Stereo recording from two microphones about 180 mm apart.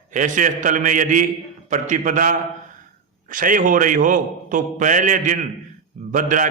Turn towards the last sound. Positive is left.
turn(degrees=-45)  # may be behind; listen again after turning